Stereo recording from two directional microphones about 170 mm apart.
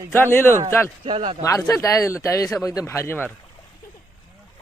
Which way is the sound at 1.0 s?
30° right (ahead or behind).